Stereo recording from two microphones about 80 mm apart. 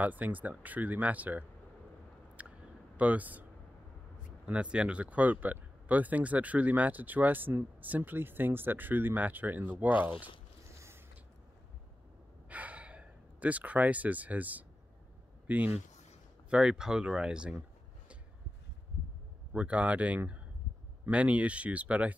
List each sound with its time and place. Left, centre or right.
0.0 s speech: right
3.0 s speech: centre
4.5 s speech: centre
12.4 s gasp: centre
15.4 s a man's voice: centre
19.5 s speech: centre